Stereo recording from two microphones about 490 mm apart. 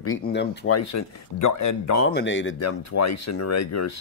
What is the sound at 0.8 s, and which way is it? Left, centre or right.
Speech, left.